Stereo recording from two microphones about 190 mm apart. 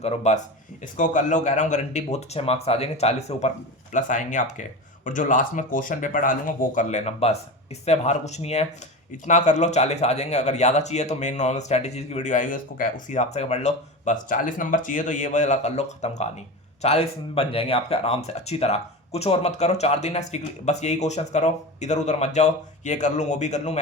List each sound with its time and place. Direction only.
0.0 s speech: 35° left (ahead or behind)